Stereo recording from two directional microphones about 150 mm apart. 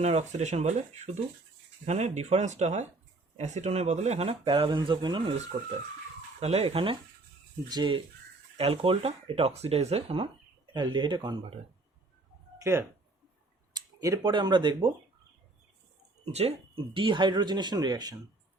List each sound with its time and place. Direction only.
0.0 s speech: 45° right (ahead or behind); by 5.2 s 30° right (ahead or behind)
5.5 s speech: 50° right (ahead or behind)
10.8 s speech: 30° right (ahead or behind)
12.5 s a sound: 15° right (ahead or behind)
14.3 s speech: 30° right (ahead or behind)
16.2 s speech: 40° right (ahead or behind); by 18.2 s 25° right (ahead or behind)